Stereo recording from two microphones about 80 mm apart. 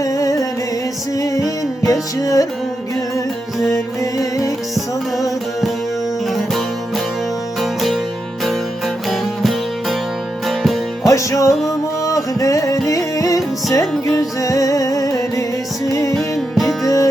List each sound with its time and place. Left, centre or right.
0.0 s music: left
4.0 s music: left
6.3 s music: centre
9.0 s music: centre
11.1 s music: left